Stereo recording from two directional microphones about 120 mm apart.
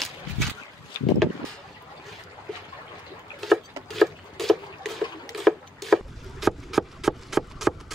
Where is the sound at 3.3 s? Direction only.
Centre (ahead or behind).